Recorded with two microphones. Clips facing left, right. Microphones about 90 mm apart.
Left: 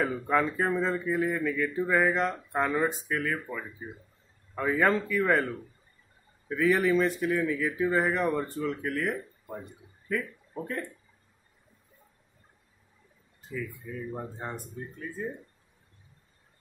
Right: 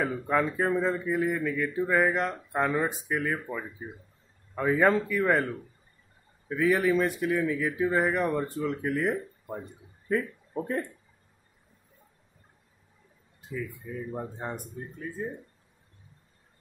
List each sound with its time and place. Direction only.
0.0 s speech: centre (ahead or behind)
10.6 s speech: 20° right (ahead or behind)
13.5 s speech: 15° right (ahead or behind)